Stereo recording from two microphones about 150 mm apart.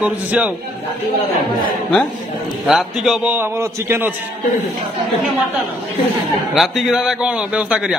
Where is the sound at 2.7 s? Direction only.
5° right (ahead or behind).